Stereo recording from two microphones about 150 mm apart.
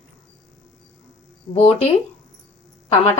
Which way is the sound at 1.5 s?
40° left (ahead or behind).